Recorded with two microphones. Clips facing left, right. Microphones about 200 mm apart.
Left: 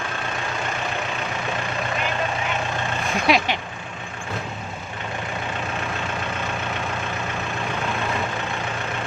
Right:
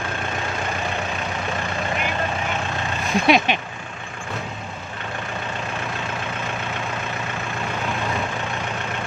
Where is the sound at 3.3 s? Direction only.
25° right (ahead or behind).